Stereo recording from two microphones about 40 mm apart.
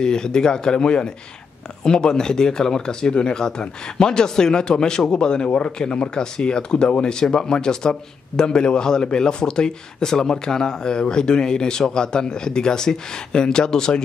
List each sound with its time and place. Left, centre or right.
0.0 s speech: centre